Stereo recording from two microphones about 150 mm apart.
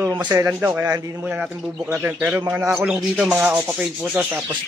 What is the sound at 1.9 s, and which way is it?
Speech, 15° right (ahead or behind).